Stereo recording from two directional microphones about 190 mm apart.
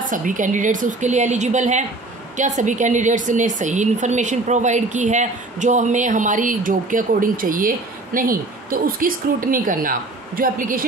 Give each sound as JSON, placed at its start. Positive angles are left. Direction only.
{"t": 0.0, "sound": "a woman's voice", "side_deg": -45}